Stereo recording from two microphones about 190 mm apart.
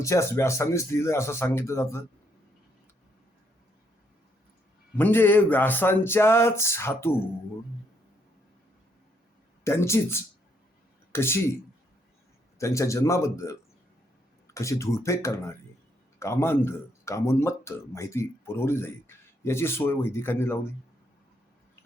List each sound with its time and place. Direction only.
0.0 s speech: 15° left (ahead or behind)
4.9 s speech: 10° left (ahead or behind)
9.6 s speech: 15° left (ahead or behind)
12.5 s speech: 15° left (ahead or behind)